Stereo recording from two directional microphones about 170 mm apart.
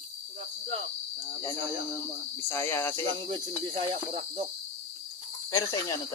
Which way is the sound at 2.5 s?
15° left (ahead or behind).